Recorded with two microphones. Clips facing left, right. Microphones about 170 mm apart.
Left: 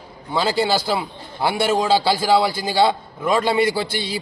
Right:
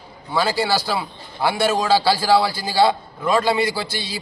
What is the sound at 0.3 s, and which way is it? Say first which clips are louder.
A man's voice: left 1 dB; 20° left (ahead or behind).